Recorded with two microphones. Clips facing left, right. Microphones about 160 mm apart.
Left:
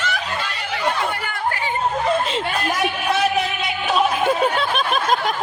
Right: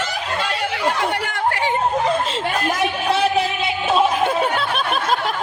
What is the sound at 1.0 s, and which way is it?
Chatter, 75° right (ahead or behind).